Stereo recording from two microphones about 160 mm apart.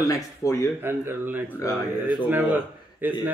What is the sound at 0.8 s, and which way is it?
Speech, 15° right (ahead or behind).